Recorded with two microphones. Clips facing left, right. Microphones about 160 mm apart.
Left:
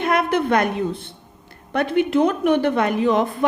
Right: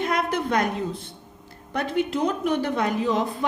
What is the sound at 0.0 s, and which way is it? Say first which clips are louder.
A woman's voice: left 5 dB; 65° left (ahead or behind).